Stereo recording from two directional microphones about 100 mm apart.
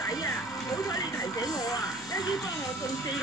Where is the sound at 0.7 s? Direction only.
35° left (ahead or behind).